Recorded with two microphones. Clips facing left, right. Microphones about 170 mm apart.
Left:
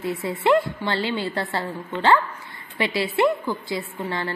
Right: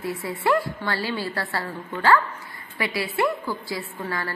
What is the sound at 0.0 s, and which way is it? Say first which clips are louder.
A woman's voice: left 3 dB; 20° left (ahead or behind).